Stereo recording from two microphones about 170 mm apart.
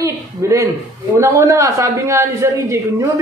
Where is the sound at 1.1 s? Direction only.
15° right (ahead or behind).